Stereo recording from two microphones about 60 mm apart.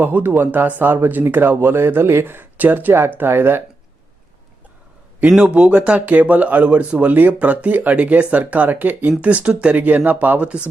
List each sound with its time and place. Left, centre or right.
0.0 s speech: right
5.5 s speech: centre